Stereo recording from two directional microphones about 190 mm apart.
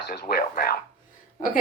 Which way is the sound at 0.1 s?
55° left (ahead or behind).